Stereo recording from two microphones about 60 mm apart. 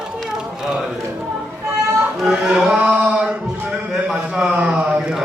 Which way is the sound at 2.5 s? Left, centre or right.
Right.